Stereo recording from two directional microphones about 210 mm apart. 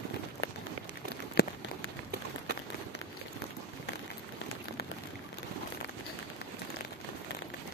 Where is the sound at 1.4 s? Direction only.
50° left (ahead or behind).